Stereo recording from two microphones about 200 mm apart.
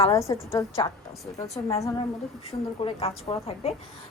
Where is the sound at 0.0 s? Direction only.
15° left (ahead or behind).